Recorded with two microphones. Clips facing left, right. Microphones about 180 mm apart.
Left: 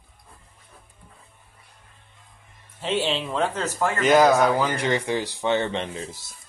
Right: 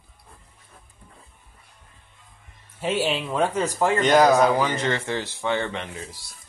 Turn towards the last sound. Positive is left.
turn(degrees=25)  # may be behind; listen again after turning